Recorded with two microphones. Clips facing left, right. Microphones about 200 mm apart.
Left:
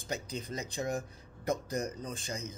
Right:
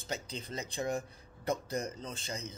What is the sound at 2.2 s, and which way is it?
Speech, 30° right (ahead or behind).